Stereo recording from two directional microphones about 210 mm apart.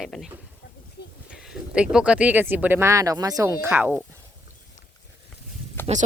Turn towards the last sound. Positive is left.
turn(degrees=10)  # may be behind; listen again after turning